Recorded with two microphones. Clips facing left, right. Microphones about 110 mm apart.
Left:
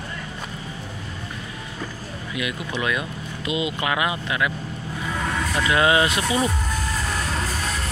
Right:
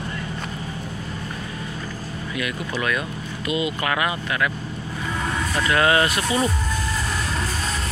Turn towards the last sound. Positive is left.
turn(degrees=20)  # may be behind; listen again after turning